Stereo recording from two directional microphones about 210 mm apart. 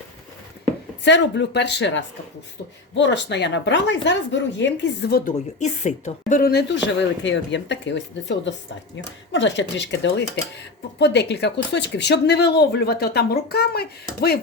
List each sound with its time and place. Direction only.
1.0 s a woman's voice: 60° left (ahead or behind)
5.5 s a woman's voice: 35° left (ahead or behind); by 14.3 s 50° left (ahead or behind)